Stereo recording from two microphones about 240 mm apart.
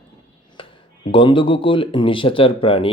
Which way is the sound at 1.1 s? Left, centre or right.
Left.